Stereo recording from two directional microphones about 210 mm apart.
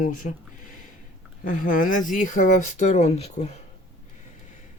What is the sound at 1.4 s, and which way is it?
Speech, 40° left (ahead or behind).